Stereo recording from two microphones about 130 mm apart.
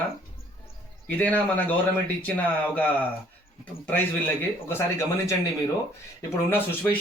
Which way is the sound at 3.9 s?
15° left (ahead or behind).